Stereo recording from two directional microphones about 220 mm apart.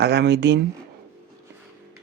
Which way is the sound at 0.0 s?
50° right (ahead or behind).